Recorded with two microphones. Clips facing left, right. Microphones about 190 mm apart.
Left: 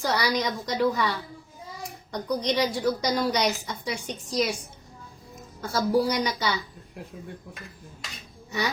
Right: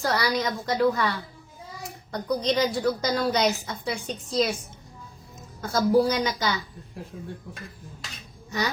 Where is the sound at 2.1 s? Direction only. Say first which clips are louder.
Right 1 dB; 15° left (ahead or behind).